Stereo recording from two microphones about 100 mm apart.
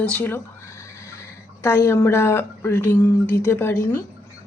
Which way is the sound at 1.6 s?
25° left (ahead or behind).